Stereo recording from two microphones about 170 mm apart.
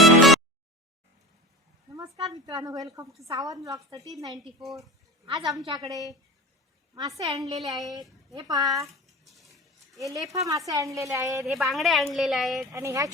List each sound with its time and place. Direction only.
0.0 s a sound: centre (ahead or behind)
2.3 s a woman's voice: 20° right (ahead or behind)
7.2 s a woman's voice: 20° right (ahead or behind)
9.0 s a sound: centre (ahead or behind)
10.0 s a woman's voice: 20° right (ahead or behind)
11.4 s a woman's voice: centre (ahead or behind)
12.7 s a woman's voice: 20° right (ahead or behind)